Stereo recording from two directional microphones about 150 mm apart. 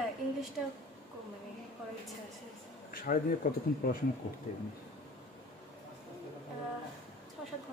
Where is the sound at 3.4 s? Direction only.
70° left (ahead or behind).